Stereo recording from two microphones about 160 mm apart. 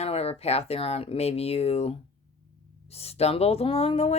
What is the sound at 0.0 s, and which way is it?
Speech, 40° left (ahead or behind).